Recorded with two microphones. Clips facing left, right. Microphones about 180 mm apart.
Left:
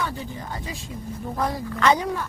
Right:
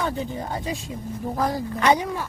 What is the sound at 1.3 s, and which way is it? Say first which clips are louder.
Speech: right 2 dB; 30° right (ahead or behind).